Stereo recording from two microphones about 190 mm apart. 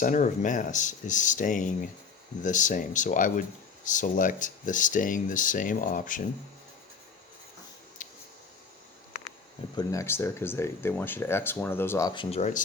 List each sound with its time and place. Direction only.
0.0 s speech: 40° left (ahead or behind)
8.0 s a sound: 45° left (ahead or behind)
9.7 s speech: 15° left (ahead or behind); by 12.6 s 40° left (ahead or behind)